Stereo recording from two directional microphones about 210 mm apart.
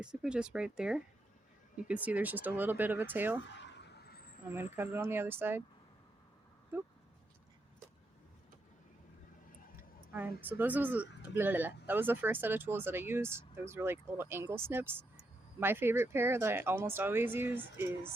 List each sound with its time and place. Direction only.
0.0 s speech: 5° right (ahead or behind)
3.4 s a sound: 55° left (ahead or behind)
4.8 s speech: 10° right (ahead or behind)
9.7 s speech: 10° right (ahead or behind)